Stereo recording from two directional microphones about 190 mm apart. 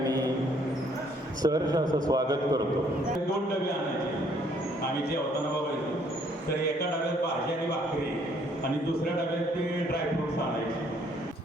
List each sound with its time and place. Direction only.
1.4 s a man's voice: 20° right (ahead or behind)